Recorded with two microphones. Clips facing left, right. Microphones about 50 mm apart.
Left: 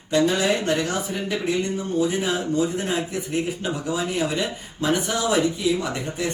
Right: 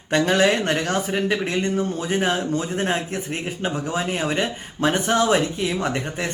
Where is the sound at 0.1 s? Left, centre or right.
Right.